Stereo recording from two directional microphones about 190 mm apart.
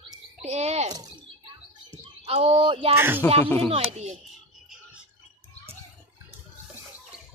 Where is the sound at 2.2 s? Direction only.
30° right (ahead or behind).